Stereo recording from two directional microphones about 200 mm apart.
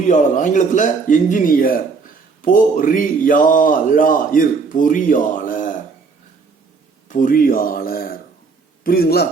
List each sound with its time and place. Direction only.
0.0 s speech: 40° left (ahead or behind)
7.1 s a man's voice: 40° left (ahead or behind)